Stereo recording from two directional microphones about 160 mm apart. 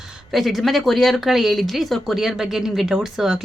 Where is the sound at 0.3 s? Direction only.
Centre (ahead or behind).